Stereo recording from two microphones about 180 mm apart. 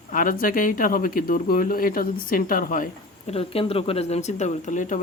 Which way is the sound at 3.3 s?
35° left (ahead or behind).